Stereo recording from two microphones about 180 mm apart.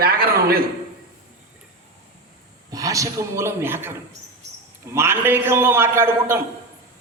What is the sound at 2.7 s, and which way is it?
A man's voice, 20° right (ahead or behind).